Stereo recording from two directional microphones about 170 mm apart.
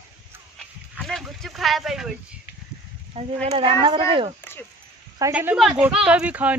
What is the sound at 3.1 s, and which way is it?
Speech, 40° right (ahead or behind).